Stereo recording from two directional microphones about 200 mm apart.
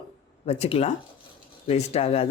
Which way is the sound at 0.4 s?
30° left (ahead or behind).